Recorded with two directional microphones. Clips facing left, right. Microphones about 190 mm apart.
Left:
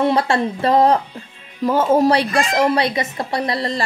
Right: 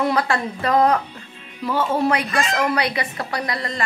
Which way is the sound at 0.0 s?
25° left (ahead or behind).